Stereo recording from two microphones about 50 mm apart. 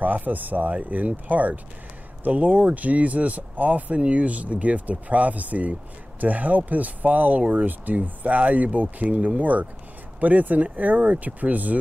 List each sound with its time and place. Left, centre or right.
0.0 s speech: right